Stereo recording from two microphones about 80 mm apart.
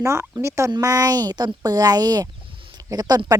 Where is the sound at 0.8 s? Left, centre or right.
Right.